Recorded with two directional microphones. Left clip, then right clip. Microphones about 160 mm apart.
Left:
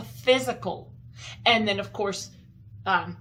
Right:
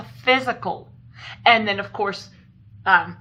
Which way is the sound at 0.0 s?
45° left (ahead or behind).